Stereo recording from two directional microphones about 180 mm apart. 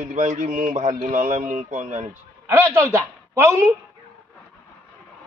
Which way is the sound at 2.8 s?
15° right (ahead or behind).